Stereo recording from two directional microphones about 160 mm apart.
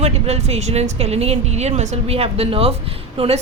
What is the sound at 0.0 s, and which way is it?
A woman's voice, 40° right (ahead or behind).